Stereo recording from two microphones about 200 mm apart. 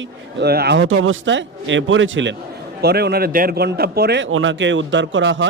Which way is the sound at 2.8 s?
55° right (ahead or behind).